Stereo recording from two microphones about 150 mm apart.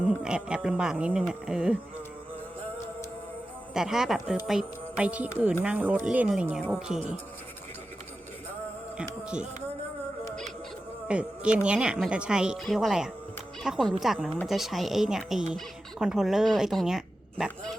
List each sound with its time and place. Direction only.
0.0 s speech: 5° right (ahead or behind)
3.8 s speech: 5° right (ahead or behind)
9.0 s speech: 5° right (ahead or behind)
11.1 s speech: 5° right (ahead or behind)